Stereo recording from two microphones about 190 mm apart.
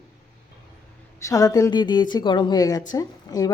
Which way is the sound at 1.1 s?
15° left (ahead or behind).